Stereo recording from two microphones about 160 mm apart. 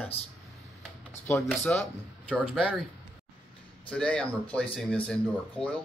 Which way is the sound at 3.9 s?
5° left (ahead or behind).